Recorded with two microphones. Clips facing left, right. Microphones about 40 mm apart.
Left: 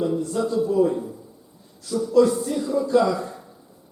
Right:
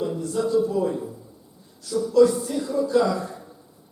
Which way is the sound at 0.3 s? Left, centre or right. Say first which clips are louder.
Even; centre.